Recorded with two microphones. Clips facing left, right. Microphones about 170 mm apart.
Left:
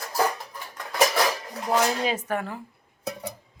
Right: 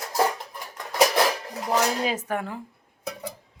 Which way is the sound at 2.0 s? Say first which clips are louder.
Even; 10° right (ahead or behind).